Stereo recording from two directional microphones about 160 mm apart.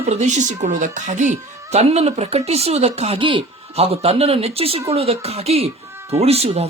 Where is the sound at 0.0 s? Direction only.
45° right (ahead or behind).